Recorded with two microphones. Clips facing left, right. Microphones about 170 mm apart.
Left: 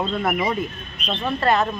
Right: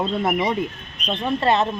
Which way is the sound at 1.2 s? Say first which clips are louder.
Right 1 dB; 20° right (ahead or behind).